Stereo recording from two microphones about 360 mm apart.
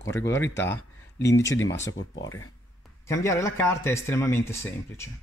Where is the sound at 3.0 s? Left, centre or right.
Centre.